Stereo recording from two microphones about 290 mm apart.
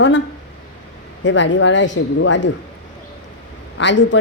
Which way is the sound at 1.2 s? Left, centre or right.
Left.